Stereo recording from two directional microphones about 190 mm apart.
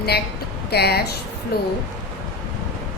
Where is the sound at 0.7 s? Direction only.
55° left (ahead or behind).